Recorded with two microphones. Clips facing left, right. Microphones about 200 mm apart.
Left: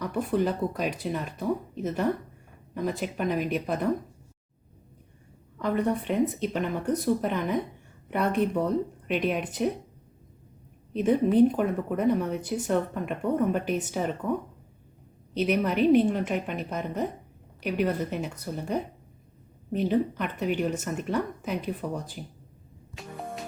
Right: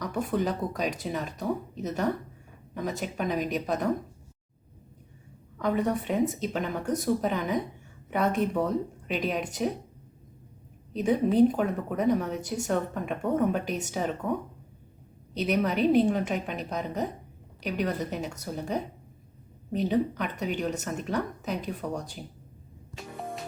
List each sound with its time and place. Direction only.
0.3 s speech: 5° left (ahead or behind)
5.6 s speech: centre (ahead or behind)
10.9 s speech: centre (ahead or behind)
15.4 s speech: 5° left (ahead or behind)
19.9 s speech: centre (ahead or behind)
23.0 s music: centre (ahead or behind)